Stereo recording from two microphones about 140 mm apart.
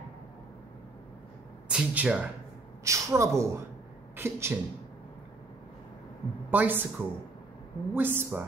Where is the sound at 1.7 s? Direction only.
5° right (ahead or behind).